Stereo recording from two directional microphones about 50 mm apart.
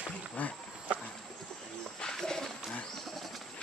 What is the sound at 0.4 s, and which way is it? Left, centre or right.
Speech, left.